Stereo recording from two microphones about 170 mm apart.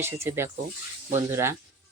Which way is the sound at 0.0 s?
15° right (ahead or behind).